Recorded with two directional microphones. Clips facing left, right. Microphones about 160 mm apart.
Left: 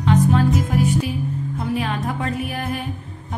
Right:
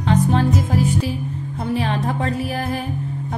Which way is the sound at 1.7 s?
30° right (ahead or behind).